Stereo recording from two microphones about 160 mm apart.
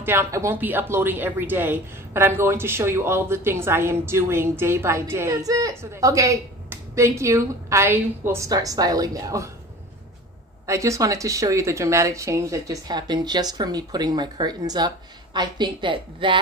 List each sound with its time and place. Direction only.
0.0 s speech: 15° right (ahead or behind)
10.7 s a woman's voice: 20° right (ahead or behind)